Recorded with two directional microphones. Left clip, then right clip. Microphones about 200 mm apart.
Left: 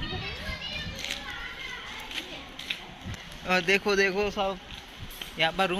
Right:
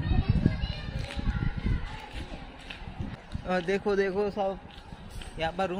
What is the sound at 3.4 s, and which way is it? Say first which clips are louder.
Speech: left 4 dB; 20° right (ahead or behind).